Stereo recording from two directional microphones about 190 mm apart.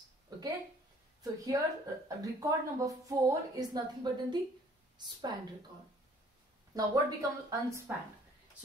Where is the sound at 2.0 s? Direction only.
15° right (ahead or behind).